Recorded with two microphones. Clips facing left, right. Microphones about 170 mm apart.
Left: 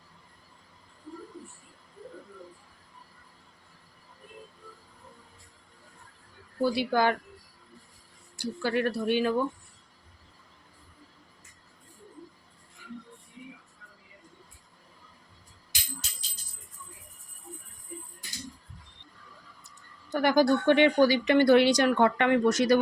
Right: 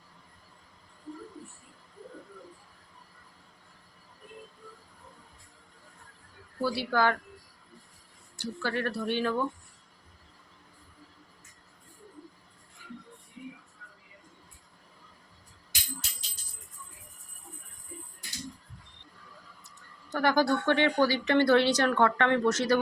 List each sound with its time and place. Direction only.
6.6 s speech: 15° left (ahead or behind)
8.4 s speech: 15° left (ahead or behind)
20.1 s speech: 15° left (ahead or behind)